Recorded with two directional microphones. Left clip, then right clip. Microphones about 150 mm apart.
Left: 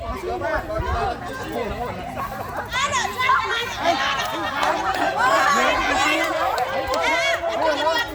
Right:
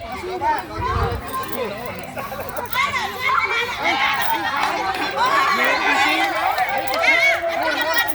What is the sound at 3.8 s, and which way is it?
Speech, 40° left (ahead or behind).